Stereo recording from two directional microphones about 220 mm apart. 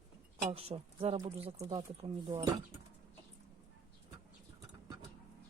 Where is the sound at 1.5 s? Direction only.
15° right (ahead or behind).